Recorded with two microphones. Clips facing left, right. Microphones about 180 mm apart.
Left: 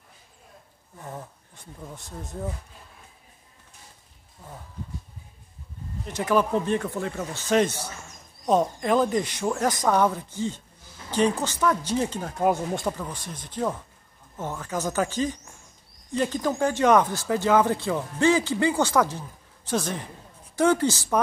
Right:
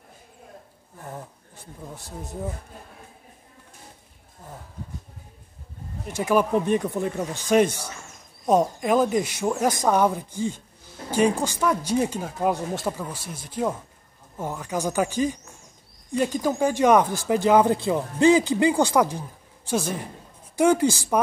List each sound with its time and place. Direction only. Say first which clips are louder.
6.0 s speech: right 1 dB; 10° right (ahead or behind)